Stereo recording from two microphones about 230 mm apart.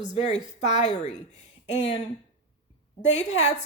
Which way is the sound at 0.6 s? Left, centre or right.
Left.